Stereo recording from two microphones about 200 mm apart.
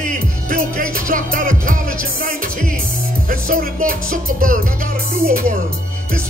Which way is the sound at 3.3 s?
45° right (ahead or behind).